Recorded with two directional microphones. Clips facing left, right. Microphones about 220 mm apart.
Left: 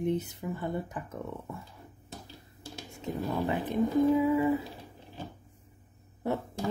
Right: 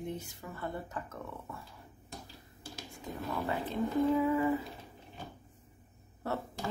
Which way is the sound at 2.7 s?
25° left (ahead or behind).